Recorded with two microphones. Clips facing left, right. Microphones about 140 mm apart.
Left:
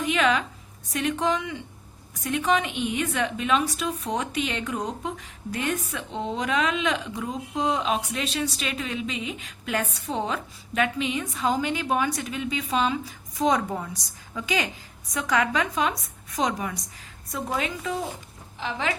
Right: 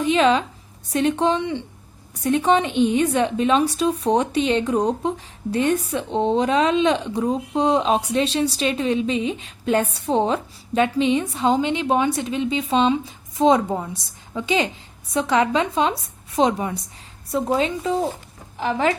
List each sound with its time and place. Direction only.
0.0 s a sound: 30° right (ahead or behind)
0.9 s a woman's voice: 30° right (ahead or behind)
18.6 s speech: 45° right (ahead or behind)